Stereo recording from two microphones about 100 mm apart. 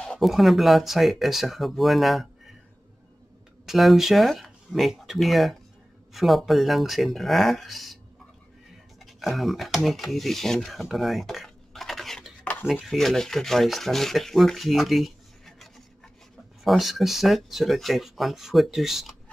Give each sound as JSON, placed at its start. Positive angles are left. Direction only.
{"t": 0.0, "sound": "rub", "side_deg": 5}
{"t": 3.6, "sound": "speech", "side_deg": 0}
{"t": 6.1, "sound": "rub", "side_deg": 0}
{"t": 9.0, "sound": "speech", "side_deg": 0}
{"t": 9.8, "sound": "filing", "side_deg": 0}
{"t": 12.8, "sound": "rub", "side_deg": 5}